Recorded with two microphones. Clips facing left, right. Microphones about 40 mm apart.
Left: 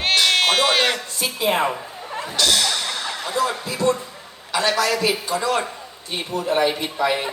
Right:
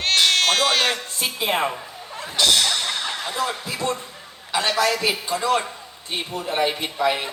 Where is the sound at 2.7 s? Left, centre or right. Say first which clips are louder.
Even; right.